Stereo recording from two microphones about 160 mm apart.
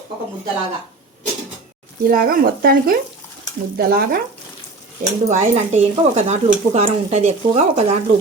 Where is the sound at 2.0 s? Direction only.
65° right (ahead or behind).